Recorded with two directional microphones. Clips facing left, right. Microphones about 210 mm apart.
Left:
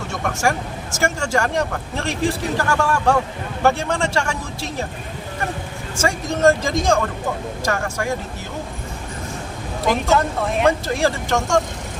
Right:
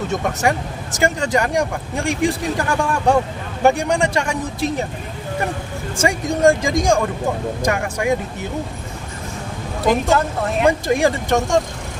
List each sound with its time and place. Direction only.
0.9 s speech: 20° right (ahead or behind)
6.0 s speech: 15° right (ahead or behind)
9.8 s a woman's voice: centre (ahead or behind)
10.7 s speech: 15° right (ahead or behind)